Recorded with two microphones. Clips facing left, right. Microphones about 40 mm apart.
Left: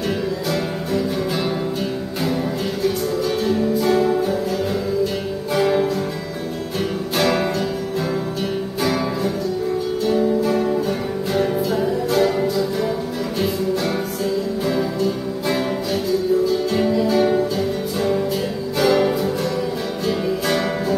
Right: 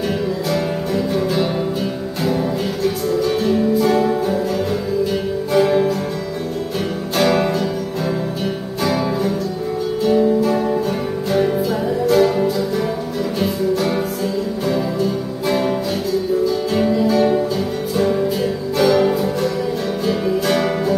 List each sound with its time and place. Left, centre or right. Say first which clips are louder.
0.5 s music: right 2 dB; centre
2.8 s music: right 2 dB; centre
5.5 s music: right 3 dB; centre
7.2 s music: right 3 dB; centre
8.8 s music: right 3 dB; centre
14.7 s music: right 2 dB; centre
16.7 s music: right 3 dB; centre